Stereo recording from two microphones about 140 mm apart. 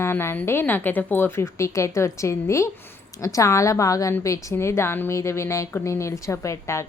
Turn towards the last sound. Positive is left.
turn(degrees=20)  # may be behind; listen again after turning